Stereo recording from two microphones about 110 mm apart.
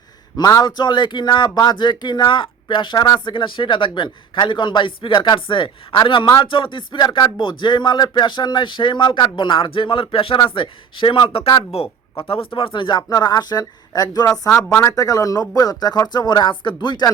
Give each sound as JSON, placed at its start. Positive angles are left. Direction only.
{"t": 0.3, "sound": "speech", "side_deg": 35}